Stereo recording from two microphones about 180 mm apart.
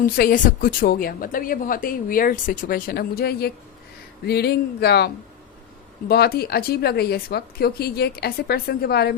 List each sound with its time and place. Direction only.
0.0 s a woman's voice: 50° left (ahead or behind)